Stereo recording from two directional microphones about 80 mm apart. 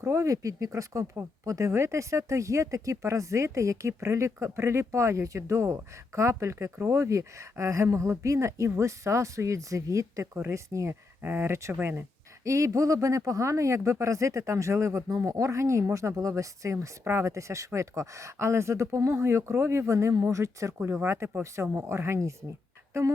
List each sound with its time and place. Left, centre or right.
0.0 s speech: right
11.2 s speech: right
12.5 s speech: right